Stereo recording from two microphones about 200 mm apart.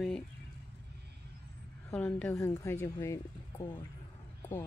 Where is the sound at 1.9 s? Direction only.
10° left (ahead or behind).